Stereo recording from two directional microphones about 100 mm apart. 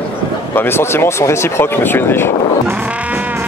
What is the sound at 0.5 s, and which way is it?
Speech, 25° left (ahead or behind).